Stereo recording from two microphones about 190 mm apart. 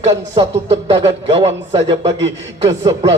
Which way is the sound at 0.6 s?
25° right (ahead or behind).